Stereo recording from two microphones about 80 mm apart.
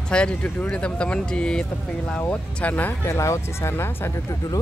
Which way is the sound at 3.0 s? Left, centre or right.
Left.